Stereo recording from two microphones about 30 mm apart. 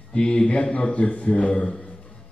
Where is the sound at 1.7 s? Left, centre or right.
Left.